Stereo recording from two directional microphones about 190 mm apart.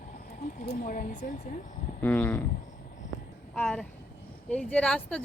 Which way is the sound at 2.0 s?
10° left (ahead or behind).